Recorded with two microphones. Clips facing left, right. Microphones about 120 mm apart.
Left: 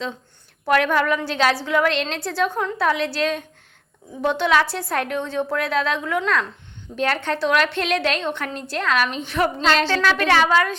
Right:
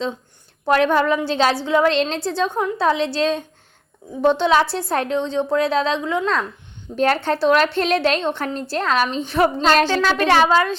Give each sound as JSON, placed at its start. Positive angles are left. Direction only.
{"t": 0.6, "sound": "a woman's voice", "side_deg": -30}
{"t": 6.9, "sound": "a woman's voice", "side_deg": -40}